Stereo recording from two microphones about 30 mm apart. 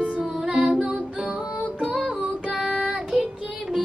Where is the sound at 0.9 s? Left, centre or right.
Right.